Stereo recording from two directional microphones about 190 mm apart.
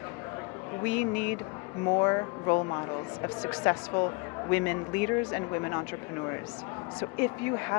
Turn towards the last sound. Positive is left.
turn(degrees=15)  # may be behind; listen again after turning